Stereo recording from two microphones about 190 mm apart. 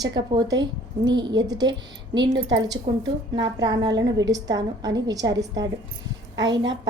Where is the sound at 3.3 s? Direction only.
20° right (ahead or behind).